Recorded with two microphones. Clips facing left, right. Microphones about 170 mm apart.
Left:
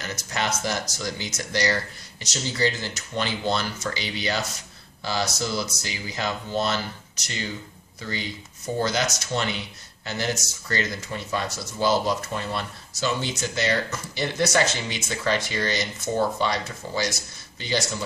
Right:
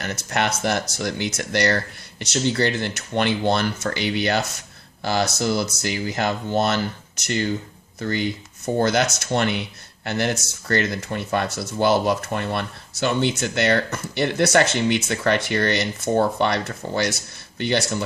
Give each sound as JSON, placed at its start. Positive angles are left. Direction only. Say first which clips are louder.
{"t": 0.0, "sound": "speech", "louder": "right 5 dB", "side_deg": -60}
{"t": 8.0, "sound": "speech", "louder": "right 8 dB", "side_deg": -55}